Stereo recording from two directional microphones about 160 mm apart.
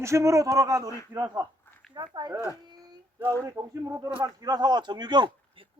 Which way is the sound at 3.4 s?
20° right (ahead or behind).